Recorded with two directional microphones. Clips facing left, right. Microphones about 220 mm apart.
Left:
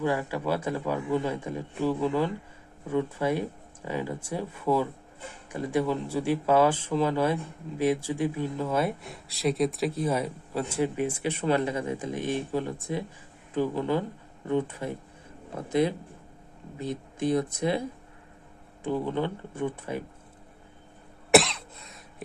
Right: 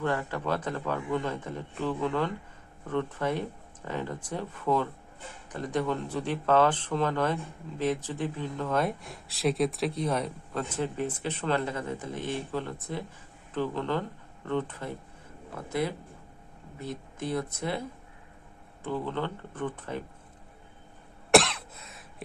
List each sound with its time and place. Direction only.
0.0 s speech: 10° left (ahead or behind)
21.2 s cough: centre (ahead or behind)